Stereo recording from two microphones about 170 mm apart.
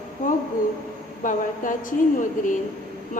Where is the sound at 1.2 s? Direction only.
50° left (ahead or behind).